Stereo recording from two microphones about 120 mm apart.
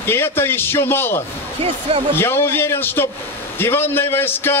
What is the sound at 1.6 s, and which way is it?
Speech, 55° right (ahead or behind).